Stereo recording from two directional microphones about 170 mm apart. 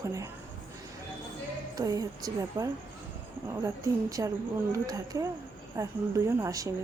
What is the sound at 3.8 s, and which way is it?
Speech, 20° right (ahead or behind).